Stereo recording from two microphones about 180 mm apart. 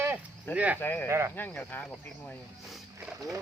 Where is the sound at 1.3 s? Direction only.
10° left (ahead or behind).